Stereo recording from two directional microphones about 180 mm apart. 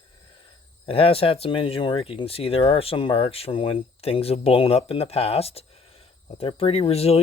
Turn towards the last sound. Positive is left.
turn(degrees=35)  # may be behind; listen again after turning